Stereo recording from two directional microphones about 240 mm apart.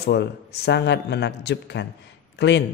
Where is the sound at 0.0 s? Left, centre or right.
Left.